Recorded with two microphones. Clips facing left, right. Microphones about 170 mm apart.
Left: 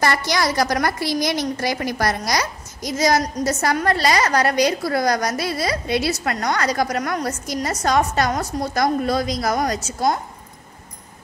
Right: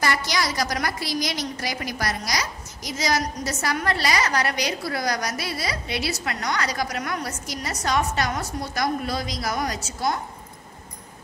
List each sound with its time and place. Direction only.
0.0 s a woman's voice: 55° left (ahead or behind)